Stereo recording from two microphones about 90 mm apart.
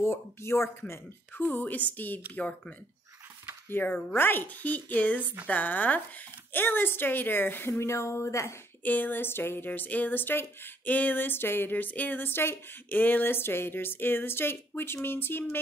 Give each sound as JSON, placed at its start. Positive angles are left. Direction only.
{"t": 0.0, "sound": "a woman's voice", "side_deg": 30}
{"t": 3.7, "sound": "a woman's voice", "side_deg": 25}
{"t": 8.8, "sound": "a woman's voice", "side_deg": 20}